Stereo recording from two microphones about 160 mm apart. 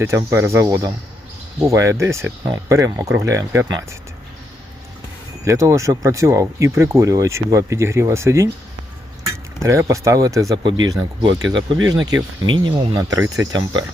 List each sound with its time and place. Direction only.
0.2 s speech: 15° right (ahead or behind)
5.5 s speech: 20° right (ahead or behind)
9.6 s speech: 20° right (ahead or behind)
13.0 s speech: 20° right (ahead or behind)